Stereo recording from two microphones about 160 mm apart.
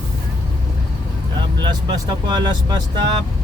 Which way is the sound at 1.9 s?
25° right (ahead or behind).